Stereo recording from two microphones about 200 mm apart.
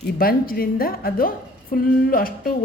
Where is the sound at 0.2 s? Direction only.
50° left (ahead or behind).